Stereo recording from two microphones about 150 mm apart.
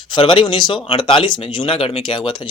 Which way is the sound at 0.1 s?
35° left (ahead or behind).